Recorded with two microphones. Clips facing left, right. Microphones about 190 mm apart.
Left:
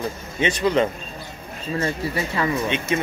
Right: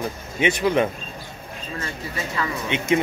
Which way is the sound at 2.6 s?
15° right (ahead or behind).